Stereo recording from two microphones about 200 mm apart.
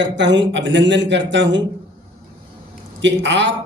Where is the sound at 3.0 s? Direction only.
65° right (ahead or behind).